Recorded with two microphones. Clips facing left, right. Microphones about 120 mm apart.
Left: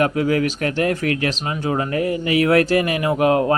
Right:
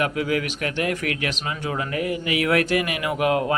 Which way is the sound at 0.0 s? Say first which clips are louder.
Left 5 dB; 40° left (ahead or behind).